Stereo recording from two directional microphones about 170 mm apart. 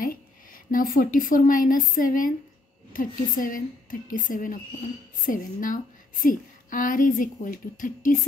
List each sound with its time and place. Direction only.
0.7 s a woman's voice: 55° left (ahead or behind)